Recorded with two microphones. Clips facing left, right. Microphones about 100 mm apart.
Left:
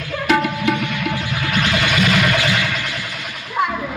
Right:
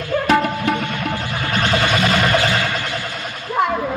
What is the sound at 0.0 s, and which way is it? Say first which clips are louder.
Music: right 2 dB; 35° right (ahead or behind).